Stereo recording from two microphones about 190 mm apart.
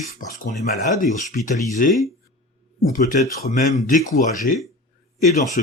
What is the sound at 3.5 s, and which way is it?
Speech, 40° left (ahead or behind).